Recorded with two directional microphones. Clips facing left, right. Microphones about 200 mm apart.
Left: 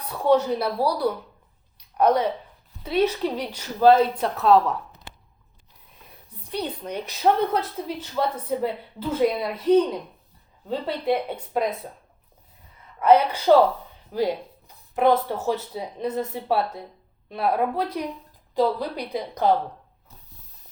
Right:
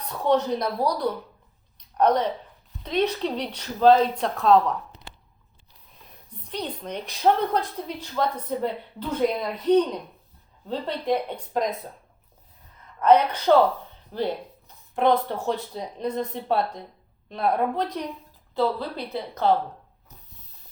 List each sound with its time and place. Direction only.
0.0 s a woman's voice: 10° left (ahead or behind)
6.1 s a woman's voice: 10° left (ahead or behind)
13.0 s a woman's voice: 10° left (ahead or behind)